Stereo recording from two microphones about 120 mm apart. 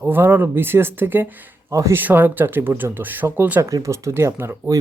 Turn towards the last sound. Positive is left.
turn(degrees=-20)  # may be behind; listen again after turning